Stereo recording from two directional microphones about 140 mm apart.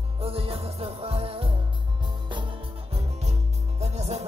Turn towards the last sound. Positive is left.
turn(degrees=-50)  # may be behind; listen again after turning